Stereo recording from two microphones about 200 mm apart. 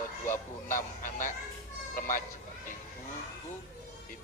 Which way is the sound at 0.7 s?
40° left (ahead or behind).